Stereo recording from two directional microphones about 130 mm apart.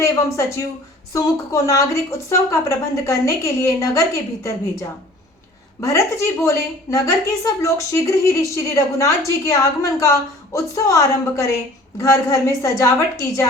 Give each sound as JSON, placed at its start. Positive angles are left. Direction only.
{"t": 0.0, "sound": "speech", "side_deg": 20}
{"t": 1.6, "sound": "a woman's voice", "side_deg": 25}